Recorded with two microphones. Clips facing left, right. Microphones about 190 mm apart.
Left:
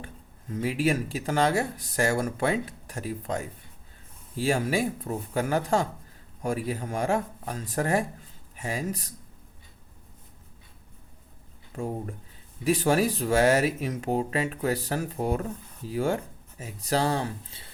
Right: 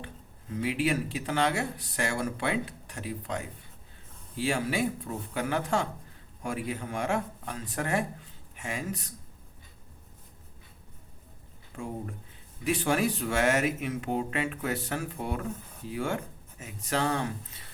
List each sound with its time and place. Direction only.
0.5 s speech: 40° left (ahead or behind)
11.8 s speech: 40° left (ahead or behind)